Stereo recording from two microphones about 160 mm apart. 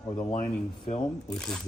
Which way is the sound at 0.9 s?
50° left (ahead or behind).